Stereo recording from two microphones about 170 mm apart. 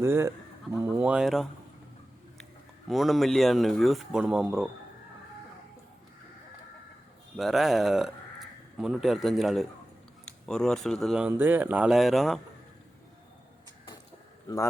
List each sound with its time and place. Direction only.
0.0 s speech: 15° right (ahead or behind)
2.9 s speech: centre (ahead or behind)
7.3 s speech: centre (ahead or behind)
11.3 s speech: 10° right (ahead or behind)